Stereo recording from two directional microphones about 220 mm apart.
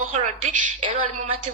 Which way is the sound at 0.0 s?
30° right (ahead or behind).